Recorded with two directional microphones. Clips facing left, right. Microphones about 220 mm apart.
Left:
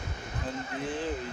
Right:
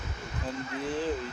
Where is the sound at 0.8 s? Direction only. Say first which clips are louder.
Right 3 dB; 35° right (ahead or behind).